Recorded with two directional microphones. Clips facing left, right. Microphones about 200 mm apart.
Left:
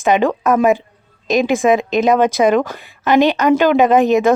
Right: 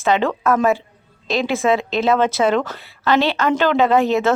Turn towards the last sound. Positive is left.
turn(degrees=15)  # may be behind; listen again after turning